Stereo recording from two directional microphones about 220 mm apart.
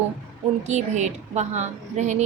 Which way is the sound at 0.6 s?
30° right (ahead or behind).